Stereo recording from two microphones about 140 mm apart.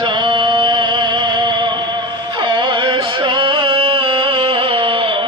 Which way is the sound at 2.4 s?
35° right (ahead or behind).